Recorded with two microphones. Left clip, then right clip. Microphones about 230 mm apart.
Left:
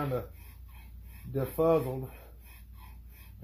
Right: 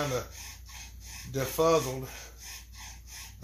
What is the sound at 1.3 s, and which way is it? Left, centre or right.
Speech, centre.